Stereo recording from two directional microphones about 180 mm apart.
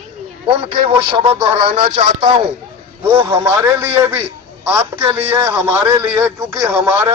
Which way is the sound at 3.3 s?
10° right (ahead or behind).